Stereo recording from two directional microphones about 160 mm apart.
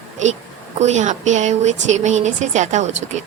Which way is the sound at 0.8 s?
45° right (ahead or behind).